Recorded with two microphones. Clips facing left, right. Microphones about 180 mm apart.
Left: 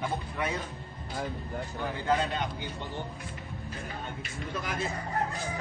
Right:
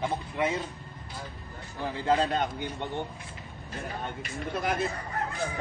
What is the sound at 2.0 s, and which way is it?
Speech, 35° right (ahead or behind).